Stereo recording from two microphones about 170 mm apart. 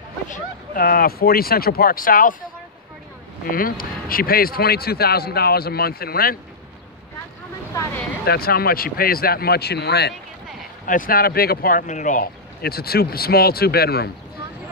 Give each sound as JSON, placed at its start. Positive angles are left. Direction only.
{"t": 0.7, "sound": "speech", "side_deg": 60}
{"t": 3.4, "sound": "speech", "side_deg": 55}
{"t": 8.3, "sound": "speech", "side_deg": 60}
{"t": 10.9, "sound": "speech", "side_deg": 55}